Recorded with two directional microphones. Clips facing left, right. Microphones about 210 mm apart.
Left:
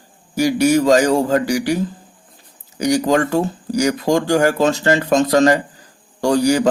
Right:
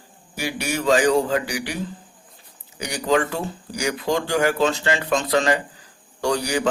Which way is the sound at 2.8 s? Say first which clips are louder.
Left 6 dB; 40° left (ahead or behind).